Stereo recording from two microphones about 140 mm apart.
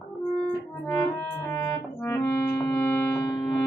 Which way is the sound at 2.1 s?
15° left (ahead or behind).